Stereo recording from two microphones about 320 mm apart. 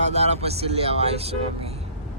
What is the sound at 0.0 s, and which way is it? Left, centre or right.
Speech, right.